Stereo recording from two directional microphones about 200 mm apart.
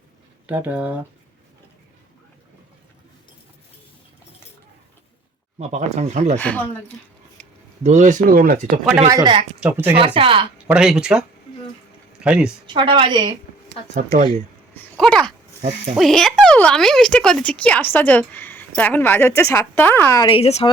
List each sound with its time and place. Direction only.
0.4 s speech: 10° right (ahead or behind)
5.5 s speech: 35° right (ahead or behind)
6.4 s speech: 5° left (ahead or behind)
7.4 s a sound: 5° left (ahead or behind)
7.9 s speech: 35° right (ahead or behind)
9.0 s a woman's voice: 20° right (ahead or behind)
9.6 s speech: 10° right (ahead or behind)
10.2 s a woman's voice: 25° right (ahead or behind)
10.7 s speech: 5° right (ahead or behind)
12.6 s a woman's voice: 25° right (ahead or behind)
13.9 s speech: 35° right (ahead or behind)
14.8 s speech: 5° left (ahead or behind)
20.2 s speech: 30° left (ahead or behind)